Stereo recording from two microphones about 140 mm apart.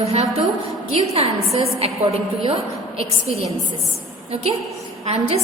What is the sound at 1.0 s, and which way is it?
A woman's voice, 50° right (ahead or behind).